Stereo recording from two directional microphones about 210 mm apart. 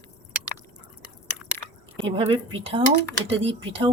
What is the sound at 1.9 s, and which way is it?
Speech, 25° right (ahead or behind).